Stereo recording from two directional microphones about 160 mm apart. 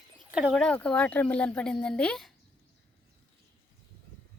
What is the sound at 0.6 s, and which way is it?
Speech, 5° left (ahead or behind).